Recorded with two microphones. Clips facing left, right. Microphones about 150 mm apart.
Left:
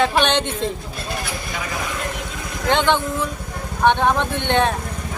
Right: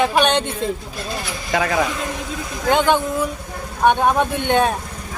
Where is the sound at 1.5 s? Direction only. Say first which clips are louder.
Right 13 dB; 75° right (ahead or behind).